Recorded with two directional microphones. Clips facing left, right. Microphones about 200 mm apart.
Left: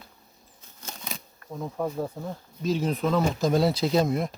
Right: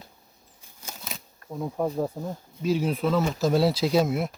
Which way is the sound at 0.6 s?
10° right (ahead or behind).